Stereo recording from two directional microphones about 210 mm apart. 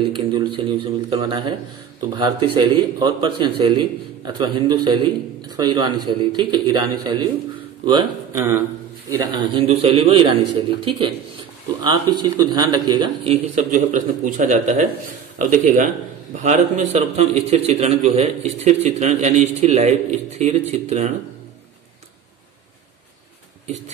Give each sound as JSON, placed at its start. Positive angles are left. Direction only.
{"t": 0.0, "sound": "a man's voice", "side_deg": -20}
{"t": 13.6, "sound": "a man's voice", "side_deg": -40}